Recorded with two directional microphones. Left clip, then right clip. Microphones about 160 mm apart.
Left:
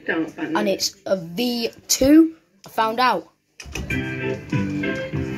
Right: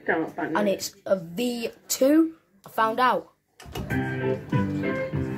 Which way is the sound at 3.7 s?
20° right (ahead or behind).